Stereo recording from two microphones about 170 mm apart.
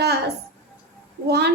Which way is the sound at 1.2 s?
75° right (ahead or behind).